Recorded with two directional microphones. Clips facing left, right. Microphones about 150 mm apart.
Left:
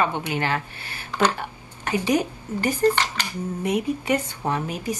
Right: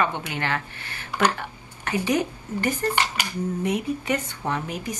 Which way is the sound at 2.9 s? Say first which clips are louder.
Left 1 dB; 10° right (ahead or behind).